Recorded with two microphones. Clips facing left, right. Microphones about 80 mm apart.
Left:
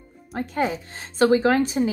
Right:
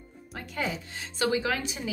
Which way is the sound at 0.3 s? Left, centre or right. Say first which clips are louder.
Left 8 dB; left.